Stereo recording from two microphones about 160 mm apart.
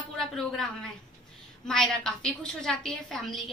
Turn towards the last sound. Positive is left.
turn(degrees=0)  # may be behind; listen again after turning